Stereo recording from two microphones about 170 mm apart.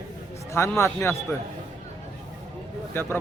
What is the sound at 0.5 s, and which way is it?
Speech, 15° left (ahead or behind).